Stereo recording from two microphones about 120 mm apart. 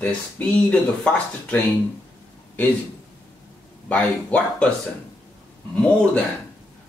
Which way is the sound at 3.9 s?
10° left (ahead or behind).